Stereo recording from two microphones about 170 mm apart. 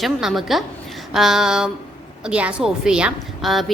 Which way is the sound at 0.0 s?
Centre (ahead or behind).